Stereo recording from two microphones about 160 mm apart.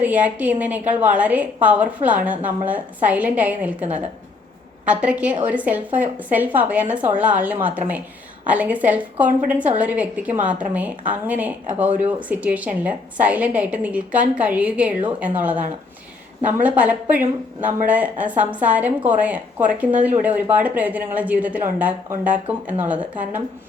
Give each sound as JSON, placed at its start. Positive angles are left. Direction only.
{"t": 0.0, "sound": "a woman's voice", "side_deg": -10}
{"t": 3.8, "sound": "a woman's voice", "side_deg": -40}
{"t": 4.9, "sound": "a woman's voice", "side_deg": -5}